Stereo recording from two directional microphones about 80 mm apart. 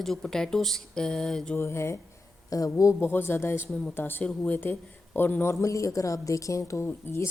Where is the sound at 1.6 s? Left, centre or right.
Left.